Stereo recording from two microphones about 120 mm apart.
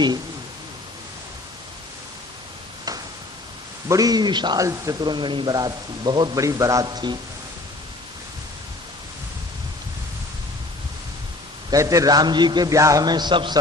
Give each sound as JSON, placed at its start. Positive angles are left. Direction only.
{"t": 3.8, "sound": "a man's voice", "side_deg": -30}
{"t": 6.4, "sound": "a man's voice", "side_deg": -25}
{"t": 11.7, "sound": "a man's voice", "side_deg": -25}